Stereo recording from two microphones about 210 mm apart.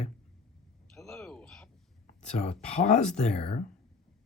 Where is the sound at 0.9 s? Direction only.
Centre (ahead or behind).